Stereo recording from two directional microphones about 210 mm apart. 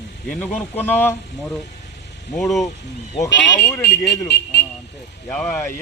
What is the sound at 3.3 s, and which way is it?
Speech, 60° left (ahead or behind).